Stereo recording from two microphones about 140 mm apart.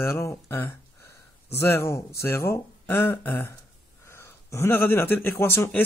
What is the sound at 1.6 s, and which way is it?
Speech, 15° left (ahead or behind).